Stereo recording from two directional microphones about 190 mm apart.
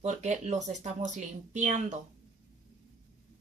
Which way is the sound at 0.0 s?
35° right (ahead or behind).